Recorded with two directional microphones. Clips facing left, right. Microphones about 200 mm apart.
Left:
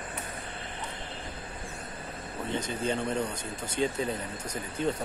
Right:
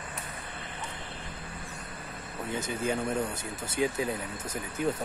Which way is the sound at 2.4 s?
10° right (ahead or behind).